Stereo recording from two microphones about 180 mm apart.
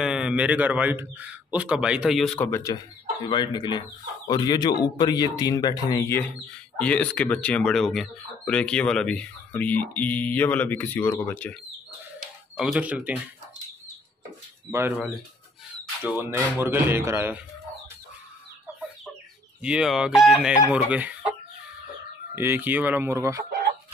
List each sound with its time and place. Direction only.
0.0 s a man's voice: 5° right (ahead or behind)
12.5 s speech: centre (ahead or behind)
14.7 s a man's voice: 10° right (ahead or behind)
19.6 s a man's voice: 5° right (ahead or behind)
22.3 s a man's voice: 10° right (ahead or behind)